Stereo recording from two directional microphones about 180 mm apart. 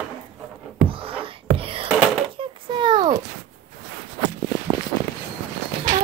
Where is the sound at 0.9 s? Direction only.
30° right (ahead or behind).